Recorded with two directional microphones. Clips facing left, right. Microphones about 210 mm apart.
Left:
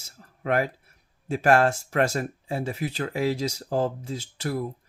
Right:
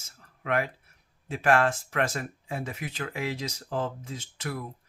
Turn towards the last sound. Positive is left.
turn(degrees=35)  # may be behind; listen again after turning